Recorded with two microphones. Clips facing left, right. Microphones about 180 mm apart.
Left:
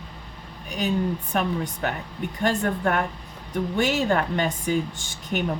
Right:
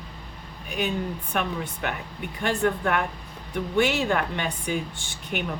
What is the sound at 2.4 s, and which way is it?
Speech, 40° left (ahead or behind).